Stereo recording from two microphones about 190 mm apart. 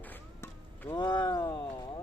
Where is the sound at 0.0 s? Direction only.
10° left (ahead or behind).